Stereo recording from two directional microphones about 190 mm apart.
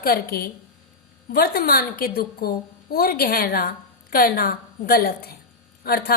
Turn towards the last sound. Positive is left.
turn(degrees=55)  # may be behind; listen again after turning